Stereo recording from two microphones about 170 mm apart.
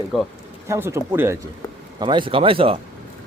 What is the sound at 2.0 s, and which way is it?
Speech, 30° right (ahead or behind).